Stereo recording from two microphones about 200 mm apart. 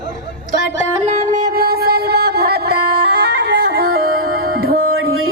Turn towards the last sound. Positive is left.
turn(degrees=-45)  # may be behind; listen again after turning